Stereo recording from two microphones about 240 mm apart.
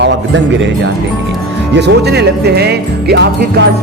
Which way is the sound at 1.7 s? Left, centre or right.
Right.